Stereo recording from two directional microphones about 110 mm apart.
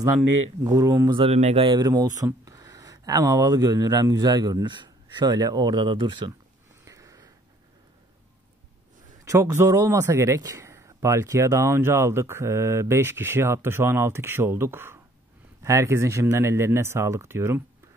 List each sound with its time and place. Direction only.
0.7 s speech: 30° right (ahead or behind)
1.1 s speech: 65° right (ahead or behind)
1.7 s speech: 35° right (ahead or behind)
6.8 s sniff: 30° right (ahead or behind)
9.2 s a man's voice: 25° right (ahead or behind)